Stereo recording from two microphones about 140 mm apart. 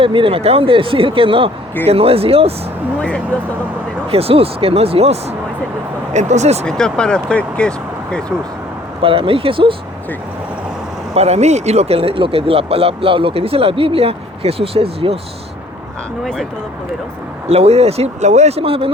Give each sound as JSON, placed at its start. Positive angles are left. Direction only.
{"t": 0.0, "sound": "speech", "side_deg": -40}
{"t": 4.1, "sound": "speech", "side_deg": -45}
{"t": 6.1, "sound": "speech", "side_deg": -55}
{"t": 6.7, "sound": "speech", "side_deg": 5}
{"t": 9.0, "sound": "speech", "side_deg": -40}
{"t": 11.1, "sound": "speech", "side_deg": -50}
{"t": 16.2, "sound": "speech", "side_deg": 0}
{"t": 17.5, "sound": "speech", "side_deg": -45}